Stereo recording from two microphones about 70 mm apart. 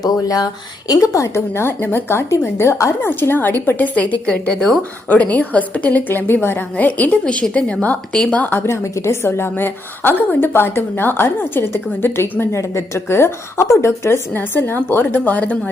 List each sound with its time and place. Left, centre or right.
0.0 s a woman's voice: left
3.1 s a woman's voice: left
8.4 s a woman's voice: left
8.7 s a woman's voice: left
14.3 s a woman's voice: left